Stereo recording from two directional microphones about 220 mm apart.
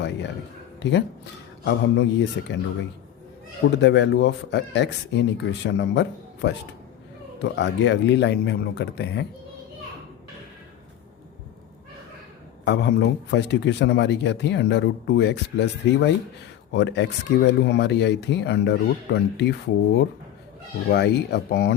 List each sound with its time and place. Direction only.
0.8 s a man's voice: 50° left (ahead or behind)
3.8 s a man's voice: 55° left (ahead or behind)
12.6 s a man's voice: 50° left (ahead or behind)
20.9 s a man's voice: 50° left (ahead or behind)